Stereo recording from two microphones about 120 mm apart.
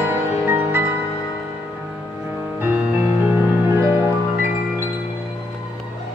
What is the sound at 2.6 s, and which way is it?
Music, 10° right (ahead or behind).